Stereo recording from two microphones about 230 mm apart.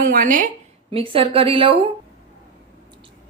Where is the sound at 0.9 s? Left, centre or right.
Right.